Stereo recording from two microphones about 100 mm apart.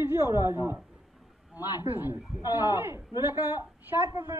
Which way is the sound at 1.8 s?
20° right (ahead or behind).